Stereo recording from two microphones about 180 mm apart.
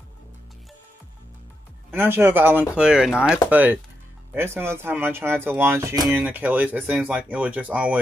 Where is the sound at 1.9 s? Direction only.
10° right (ahead or behind).